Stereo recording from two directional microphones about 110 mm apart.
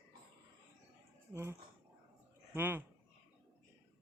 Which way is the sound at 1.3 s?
25° right (ahead or behind).